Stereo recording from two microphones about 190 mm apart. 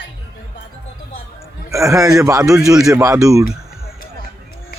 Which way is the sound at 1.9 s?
15° right (ahead or behind).